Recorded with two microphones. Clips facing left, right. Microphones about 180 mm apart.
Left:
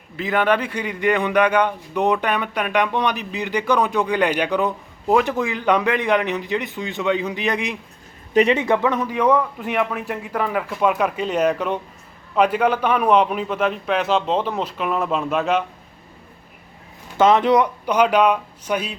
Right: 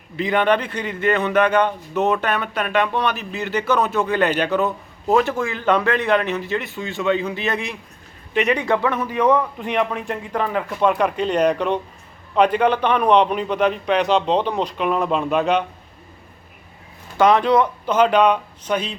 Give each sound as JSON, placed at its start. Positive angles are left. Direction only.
{"t": 0.2, "sound": "a man's voice", "side_deg": 5}
{"t": 8.3, "sound": "speech", "side_deg": 35}
{"t": 8.5, "sound": "a man's voice", "side_deg": 20}
{"t": 17.2, "sound": "a man's voice", "side_deg": 20}